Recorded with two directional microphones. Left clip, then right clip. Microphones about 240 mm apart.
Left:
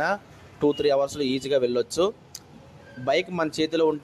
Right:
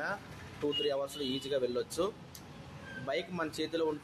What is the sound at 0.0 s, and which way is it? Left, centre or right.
Speech, left.